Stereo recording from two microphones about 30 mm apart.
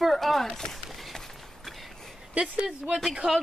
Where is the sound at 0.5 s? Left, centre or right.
Centre.